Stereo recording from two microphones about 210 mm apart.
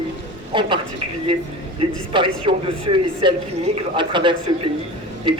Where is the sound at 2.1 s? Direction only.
25° right (ahead or behind).